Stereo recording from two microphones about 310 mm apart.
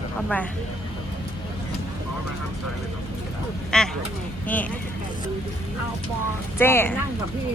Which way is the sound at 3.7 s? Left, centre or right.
Centre.